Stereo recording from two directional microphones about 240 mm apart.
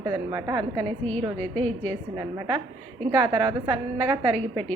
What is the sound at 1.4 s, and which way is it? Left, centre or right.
Speech, centre.